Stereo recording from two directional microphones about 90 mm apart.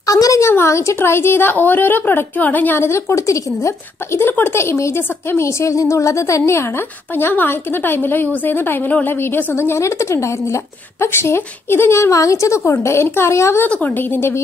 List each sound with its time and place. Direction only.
0.0 s a woman's voice: 40° left (ahead or behind)
13.7 s a woman's voice: 20° left (ahead or behind)